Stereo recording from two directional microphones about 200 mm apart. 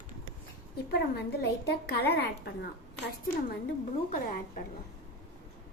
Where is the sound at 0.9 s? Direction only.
55° left (ahead or behind).